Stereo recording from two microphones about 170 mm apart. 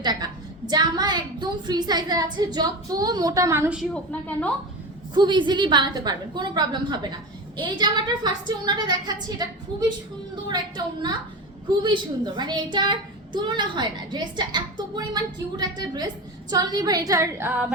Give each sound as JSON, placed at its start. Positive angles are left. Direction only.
{"t": 0.0, "sound": "a woman's voice", "side_deg": -25}
{"t": 4.1, "sound": "a woman's voice", "side_deg": 10}
{"t": 5.1, "sound": "speech", "side_deg": -25}
{"t": 10.5, "sound": "speech", "side_deg": -25}